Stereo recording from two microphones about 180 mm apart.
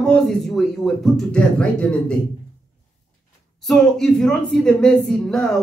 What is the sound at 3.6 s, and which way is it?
Speech, centre (ahead or behind).